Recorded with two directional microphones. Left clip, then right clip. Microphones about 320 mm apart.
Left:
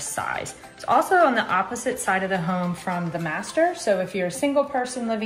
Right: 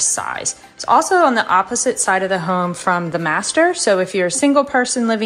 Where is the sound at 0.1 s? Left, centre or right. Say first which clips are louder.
Right 5 dB; centre.